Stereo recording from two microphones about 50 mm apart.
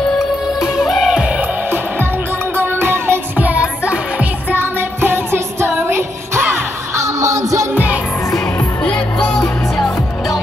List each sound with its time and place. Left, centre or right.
0.6 s music: centre
2.5 s music: right
3.3 s music: right
4.6 s music: right
7.0 s music: right
7.7 s music: right
8.5 s music: left